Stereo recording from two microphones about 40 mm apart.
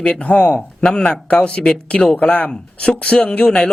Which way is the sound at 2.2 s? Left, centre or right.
Left.